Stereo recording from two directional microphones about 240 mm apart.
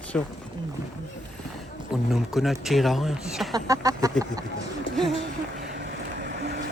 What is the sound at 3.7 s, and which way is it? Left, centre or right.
Chicken, centre.